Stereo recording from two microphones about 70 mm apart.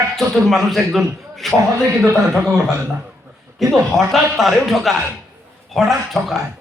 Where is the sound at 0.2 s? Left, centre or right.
Centre.